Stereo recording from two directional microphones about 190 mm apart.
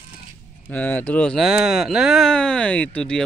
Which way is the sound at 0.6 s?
10° left (ahead or behind).